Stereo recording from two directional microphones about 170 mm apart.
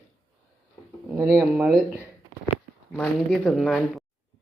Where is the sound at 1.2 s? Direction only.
10° right (ahead or behind).